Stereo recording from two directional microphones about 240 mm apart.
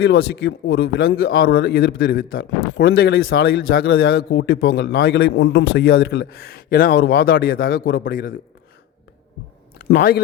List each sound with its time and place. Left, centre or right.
0.0 s a man's voice: left
9.7 s speech: left